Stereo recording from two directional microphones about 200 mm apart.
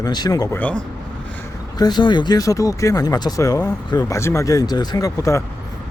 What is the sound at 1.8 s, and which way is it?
Speech, 20° left (ahead or behind).